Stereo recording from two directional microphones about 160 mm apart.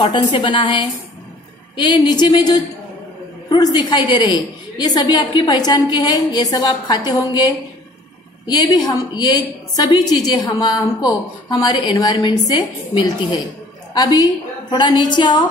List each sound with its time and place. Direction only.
0.0 s a woman's voice: 30° left (ahead or behind)